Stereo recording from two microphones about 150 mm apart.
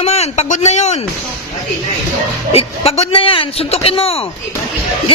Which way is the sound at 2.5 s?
40° left (ahead or behind).